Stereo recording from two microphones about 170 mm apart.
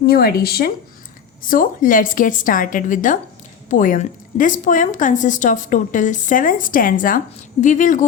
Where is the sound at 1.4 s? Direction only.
55° left (ahead or behind).